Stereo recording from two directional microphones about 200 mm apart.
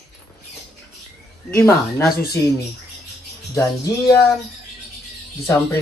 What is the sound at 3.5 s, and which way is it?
Speech, 15° left (ahead or behind).